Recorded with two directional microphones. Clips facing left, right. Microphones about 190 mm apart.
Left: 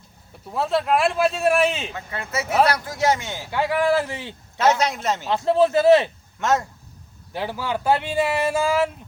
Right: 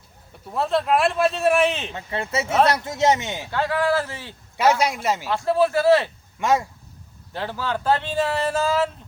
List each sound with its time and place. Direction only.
0.4 s speech: centre (ahead or behind)
1.9 s speech: 25° right (ahead or behind)
3.5 s speech: 15° left (ahead or behind)
4.5 s a man's voice: 10° right (ahead or behind)
5.3 s speech: 20° left (ahead or behind)
6.4 s a man's voice: 10° right (ahead or behind)
7.3 s speech: 10° left (ahead or behind)